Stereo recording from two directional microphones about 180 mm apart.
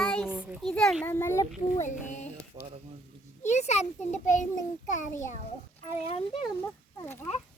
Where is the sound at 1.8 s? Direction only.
40° left (ahead or behind).